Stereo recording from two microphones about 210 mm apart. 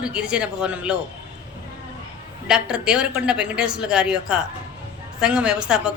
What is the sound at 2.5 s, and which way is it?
A woman's voice, 5° right (ahead or behind).